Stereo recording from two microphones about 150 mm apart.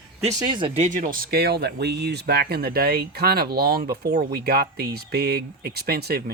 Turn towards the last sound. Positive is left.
turn(degrees=-90)